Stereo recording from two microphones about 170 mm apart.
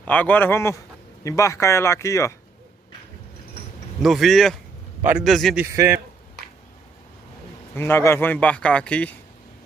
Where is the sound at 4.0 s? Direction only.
Centre (ahead or behind).